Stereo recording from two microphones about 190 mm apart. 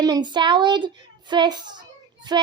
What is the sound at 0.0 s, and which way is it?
A child's voice, 20° right (ahead or behind).